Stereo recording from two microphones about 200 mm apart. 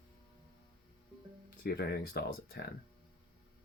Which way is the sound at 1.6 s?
50° left (ahead or behind).